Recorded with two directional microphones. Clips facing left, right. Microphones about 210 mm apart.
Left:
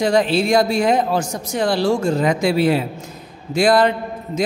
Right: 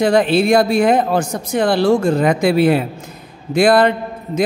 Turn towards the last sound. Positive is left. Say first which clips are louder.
# right 3 dB
turn(degrees=-55)  # may be behind; listen again after turning